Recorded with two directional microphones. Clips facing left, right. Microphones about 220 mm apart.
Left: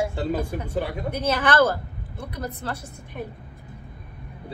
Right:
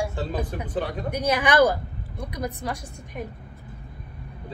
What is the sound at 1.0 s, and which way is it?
A woman's voice, 15° right (ahead or behind).